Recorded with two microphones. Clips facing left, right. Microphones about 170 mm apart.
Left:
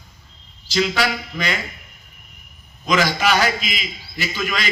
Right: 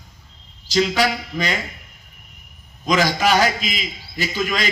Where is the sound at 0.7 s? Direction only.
40° right (ahead or behind).